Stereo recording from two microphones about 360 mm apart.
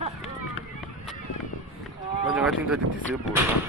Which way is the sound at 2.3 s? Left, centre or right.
Centre.